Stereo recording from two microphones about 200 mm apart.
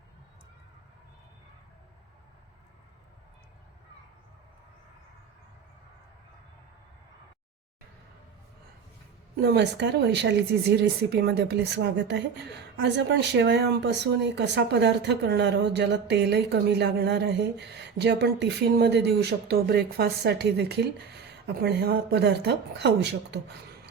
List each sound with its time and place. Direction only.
9.3 s speech: 55° right (ahead or behind)